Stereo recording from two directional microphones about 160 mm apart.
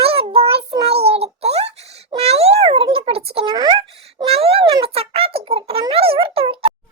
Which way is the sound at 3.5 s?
25° right (ahead or behind).